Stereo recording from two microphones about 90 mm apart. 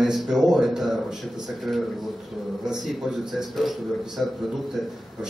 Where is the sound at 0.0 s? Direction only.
5° right (ahead or behind).